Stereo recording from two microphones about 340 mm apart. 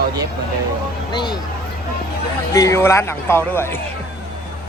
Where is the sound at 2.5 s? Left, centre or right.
Centre.